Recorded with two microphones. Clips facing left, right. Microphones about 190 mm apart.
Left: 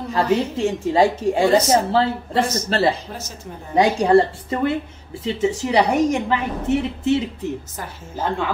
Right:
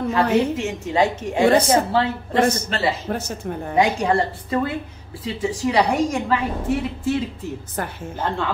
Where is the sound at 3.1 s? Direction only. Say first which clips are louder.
Right 8 dB; 60° right (ahead or behind).